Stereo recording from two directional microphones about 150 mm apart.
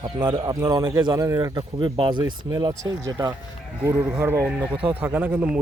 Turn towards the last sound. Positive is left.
turn(degrees=-10)  # may be behind; listen again after turning